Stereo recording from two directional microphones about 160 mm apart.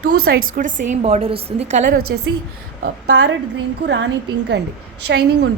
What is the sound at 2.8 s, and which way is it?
A woman's voice, 90° right.